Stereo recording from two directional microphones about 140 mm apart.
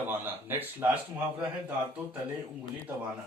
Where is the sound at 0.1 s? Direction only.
15° right (ahead or behind).